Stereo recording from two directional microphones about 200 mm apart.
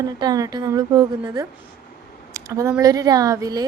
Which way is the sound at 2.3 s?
15° right (ahead or behind).